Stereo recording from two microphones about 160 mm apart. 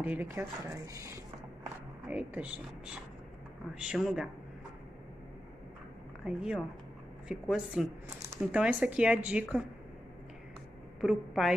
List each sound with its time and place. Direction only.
0.0 s a woman's voice: 10° right (ahead or behind)
6.2 s a woman's voice: 5° right (ahead or behind)
11.0 s a woman's voice: 5° right (ahead or behind)